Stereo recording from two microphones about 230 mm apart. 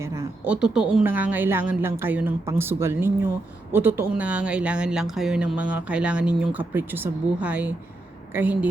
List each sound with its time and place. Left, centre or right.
0.0 s a woman's voice: centre